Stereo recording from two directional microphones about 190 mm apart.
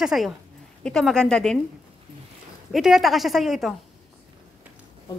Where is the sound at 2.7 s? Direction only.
Centre (ahead or behind).